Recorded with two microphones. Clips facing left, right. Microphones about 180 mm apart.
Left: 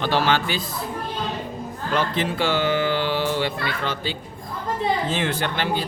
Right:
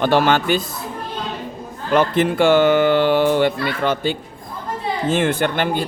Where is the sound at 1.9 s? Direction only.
50° right (ahead or behind).